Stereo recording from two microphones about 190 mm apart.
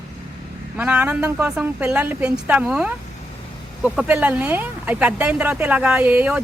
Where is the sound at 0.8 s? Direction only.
5° right (ahead or behind).